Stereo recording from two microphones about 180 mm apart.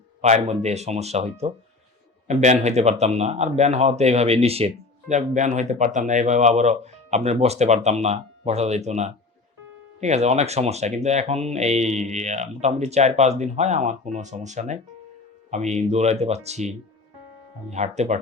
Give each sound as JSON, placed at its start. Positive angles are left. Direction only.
{"t": 0.2, "sound": "speech", "side_deg": -40}